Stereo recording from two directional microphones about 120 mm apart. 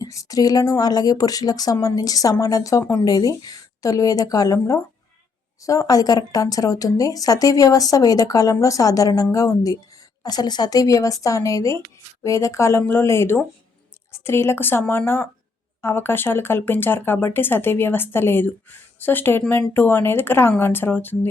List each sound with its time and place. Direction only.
0.0 s speech: 30° left (ahead or behind)